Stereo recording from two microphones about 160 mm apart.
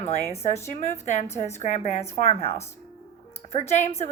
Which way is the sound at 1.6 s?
45° left (ahead or behind).